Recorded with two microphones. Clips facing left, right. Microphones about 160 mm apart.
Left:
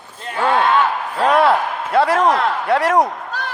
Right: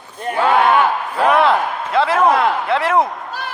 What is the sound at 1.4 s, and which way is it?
A man's voice, 45° left (ahead or behind).